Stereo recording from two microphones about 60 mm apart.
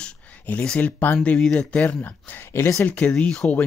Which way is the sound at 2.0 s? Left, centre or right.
Left.